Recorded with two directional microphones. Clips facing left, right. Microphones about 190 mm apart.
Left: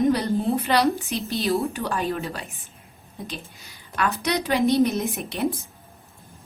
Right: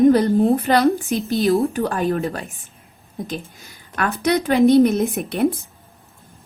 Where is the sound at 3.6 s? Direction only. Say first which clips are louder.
Left 2 dB; 50° right (ahead or behind).